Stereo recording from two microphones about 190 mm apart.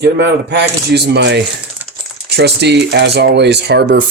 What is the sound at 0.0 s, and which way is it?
Speech, 65° right (ahead or behind).